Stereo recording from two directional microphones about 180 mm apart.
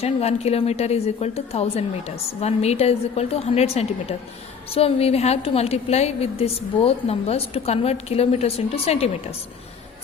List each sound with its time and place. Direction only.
0.0 s a woman's voice: 35° left (ahead or behind)